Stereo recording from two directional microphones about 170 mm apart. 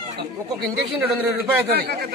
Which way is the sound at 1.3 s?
70° right (ahead or behind).